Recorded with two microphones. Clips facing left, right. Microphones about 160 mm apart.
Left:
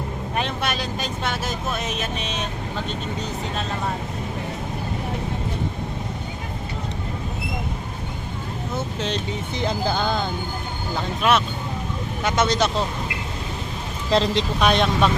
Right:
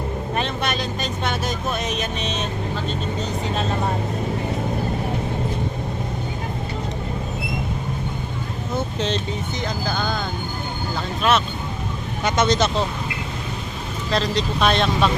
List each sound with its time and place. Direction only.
0.3 s speech: 5° left (ahead or behind)
9.6 s speech: 25° left (ahead or behind)
11.2 s speech: 10° left (ahead or behind)
14.1 s speech: 25° left (ahead or behind)
14.6 s speech: 15° left (ahead or behind)